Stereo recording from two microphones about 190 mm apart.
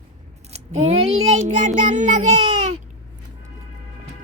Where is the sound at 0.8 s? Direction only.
35° right (ahead or behind).